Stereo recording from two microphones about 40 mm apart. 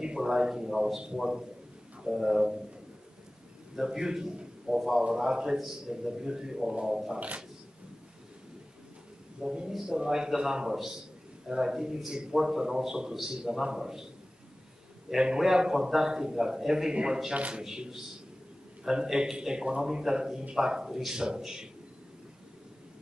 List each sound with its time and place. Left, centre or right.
0.0 s a man's voice: centre
3.7 s a man's voice: centre
4.6 s a man's voice: centre
7.2 s speech: right
9.7 s a man's voice: centre
15.1 s a man's voice: centre